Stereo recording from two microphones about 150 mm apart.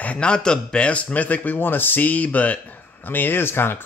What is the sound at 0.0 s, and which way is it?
Speech, 10° left (ahead or behind).